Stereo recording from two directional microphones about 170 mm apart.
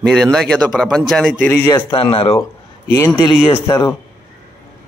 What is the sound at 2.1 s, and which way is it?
Speech, 35° left (ahead or behind).